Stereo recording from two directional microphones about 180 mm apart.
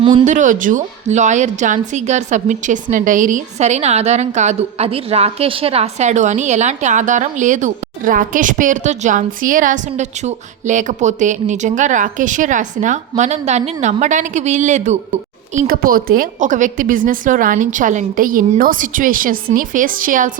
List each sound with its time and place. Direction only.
0.3 s a woman's voice: 45° right (ahead or behind)
15.5 s a woman's voice: 50° right (ahead or behind)